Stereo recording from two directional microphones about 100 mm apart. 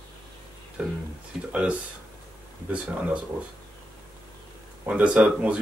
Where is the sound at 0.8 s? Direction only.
10° right (ahead or behind).